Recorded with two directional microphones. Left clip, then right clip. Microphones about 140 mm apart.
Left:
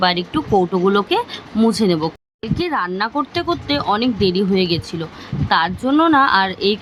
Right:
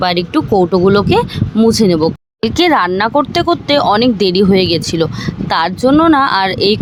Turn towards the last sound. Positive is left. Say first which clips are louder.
# right 4 dB
turn(degrees=-50)  # may be behind; listen again after turning